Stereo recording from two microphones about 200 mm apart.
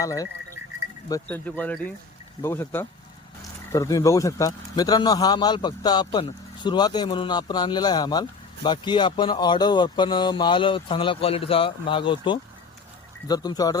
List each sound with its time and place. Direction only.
0.0 s a man's voice: 15° left (ahead or behind)